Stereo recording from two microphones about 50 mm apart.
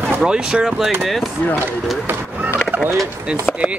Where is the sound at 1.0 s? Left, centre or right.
Centre.